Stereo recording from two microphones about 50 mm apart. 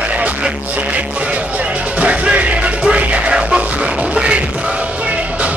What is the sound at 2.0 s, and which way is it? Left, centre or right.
Music, right.